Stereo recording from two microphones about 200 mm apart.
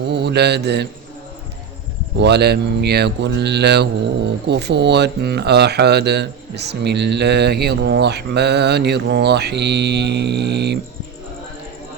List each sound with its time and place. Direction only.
0.1 s speech: 55° right (ahead or behind)
2.2 s speech: 55° right (ahead or behind)